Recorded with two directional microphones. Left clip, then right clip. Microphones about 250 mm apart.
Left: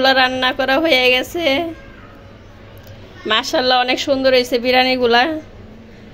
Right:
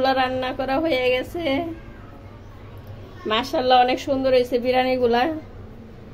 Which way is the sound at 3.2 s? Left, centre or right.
Centre.